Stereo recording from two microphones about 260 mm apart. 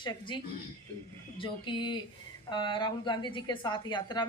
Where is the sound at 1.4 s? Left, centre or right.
Centre.